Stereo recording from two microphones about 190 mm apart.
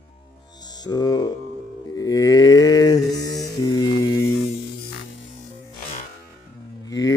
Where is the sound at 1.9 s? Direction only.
20° left (ahead or behind).